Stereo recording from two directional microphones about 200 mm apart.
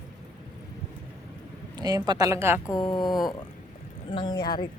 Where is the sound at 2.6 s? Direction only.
20° left (ahead or behind).